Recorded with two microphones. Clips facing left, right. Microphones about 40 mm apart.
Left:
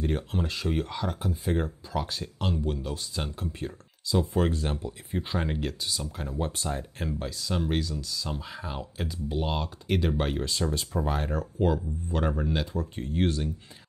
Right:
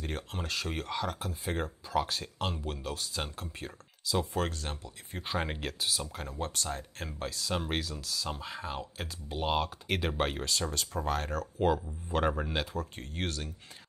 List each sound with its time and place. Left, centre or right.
0.0 s speech: centre
2.9 s speech: centre
4.5 s speech: left
5.3 s speech: centre
6.1 s speech: centre
6.5 s speech: centre
7.1 s speech: centre
10.7 s speech: centre
11.6 s speech: centre
12.7 s speech: centre